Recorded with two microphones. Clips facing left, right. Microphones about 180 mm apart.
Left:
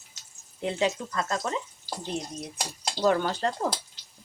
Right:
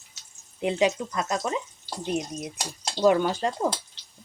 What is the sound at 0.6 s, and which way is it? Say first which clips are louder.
Speech: right 4 dB; 15° right (ahead or behind).